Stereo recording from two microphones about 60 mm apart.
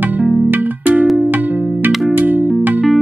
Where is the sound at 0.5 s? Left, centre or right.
Right.